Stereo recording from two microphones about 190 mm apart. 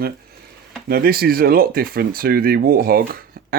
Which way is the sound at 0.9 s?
55° right (ahead or behind).